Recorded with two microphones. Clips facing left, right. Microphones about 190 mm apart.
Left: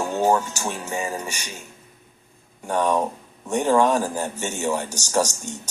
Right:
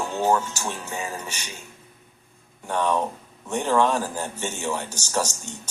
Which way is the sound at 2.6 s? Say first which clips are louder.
Left 2 dB; 10° left (ahead or behind).